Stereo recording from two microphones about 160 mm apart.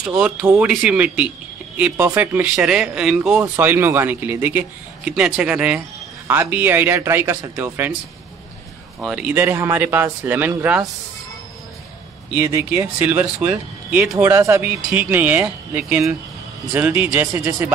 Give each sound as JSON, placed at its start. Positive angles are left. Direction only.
{"t": 0.0, "sound": "speech", "side_deg": -5}
{"t": 9.0, "sound": "speech", "side_deg": -5}
{"t": 12.6, "sound": "speech", "side_deg": -10}